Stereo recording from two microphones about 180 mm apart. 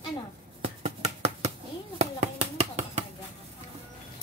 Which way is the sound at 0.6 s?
35° right (ahead or behind).